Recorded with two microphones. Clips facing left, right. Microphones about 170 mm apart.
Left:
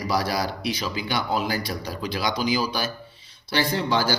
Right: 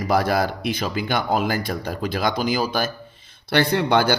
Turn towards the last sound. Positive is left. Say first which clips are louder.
# right 5 dB
turn(degrees=-60)  # may be behind; listen again after turning